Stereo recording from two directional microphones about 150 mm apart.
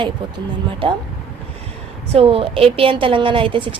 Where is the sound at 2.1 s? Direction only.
40° right (ahead or behind).